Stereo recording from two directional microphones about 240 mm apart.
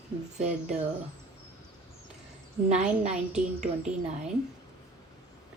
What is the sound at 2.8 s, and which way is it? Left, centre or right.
Speech, right.